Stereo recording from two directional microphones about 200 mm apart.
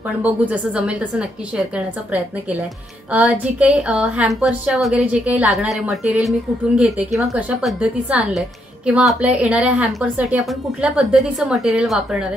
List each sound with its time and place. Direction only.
0.2 s a woman's voice: 5° right (ahead or behind)
3.1 s a woman's voice: 5° right (ahead or behind)